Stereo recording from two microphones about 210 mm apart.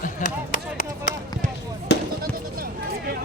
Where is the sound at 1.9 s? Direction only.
55° left (ahead or behind).